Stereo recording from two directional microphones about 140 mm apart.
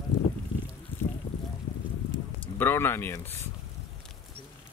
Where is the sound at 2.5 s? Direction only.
15° left (ahead or behind).